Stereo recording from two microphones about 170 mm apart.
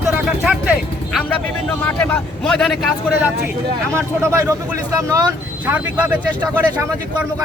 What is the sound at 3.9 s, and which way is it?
Speech, 15° right (ahead or behind).